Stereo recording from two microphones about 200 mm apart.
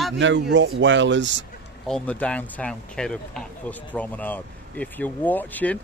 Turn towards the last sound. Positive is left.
turn(degrees=10)  # may be behind; listen again after turning